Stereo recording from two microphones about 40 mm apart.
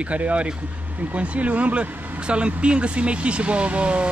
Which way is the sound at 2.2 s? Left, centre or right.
Right.